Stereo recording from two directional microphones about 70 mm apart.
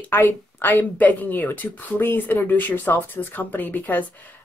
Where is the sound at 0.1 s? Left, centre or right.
Left.